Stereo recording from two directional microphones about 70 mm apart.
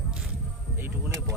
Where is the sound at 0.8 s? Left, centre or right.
Right.